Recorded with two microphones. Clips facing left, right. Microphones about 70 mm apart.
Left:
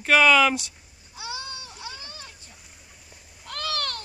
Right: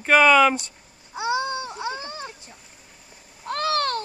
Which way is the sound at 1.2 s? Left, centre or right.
Right.